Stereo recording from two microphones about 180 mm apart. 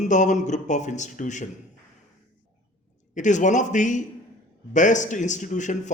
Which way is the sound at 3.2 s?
45° left (ahead or behind).